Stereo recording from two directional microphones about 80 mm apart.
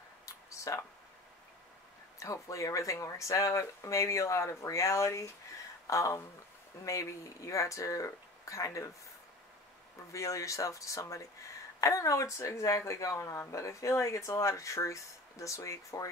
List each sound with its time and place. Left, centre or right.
0.2 s a sound: left
2.1 s speech: left
10.1 s speech: left